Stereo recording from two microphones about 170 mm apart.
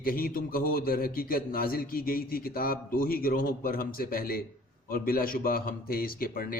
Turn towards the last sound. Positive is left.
turn(degrees=60)  # may be behind; listen again after turning